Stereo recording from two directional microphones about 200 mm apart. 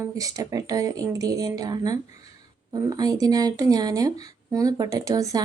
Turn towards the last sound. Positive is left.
turn(degrees=-15)  # may be behind; listen again after turning